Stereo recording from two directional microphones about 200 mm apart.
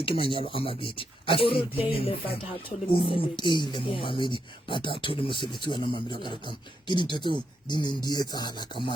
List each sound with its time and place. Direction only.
0.0 s speech: 25° left (ahead or behind)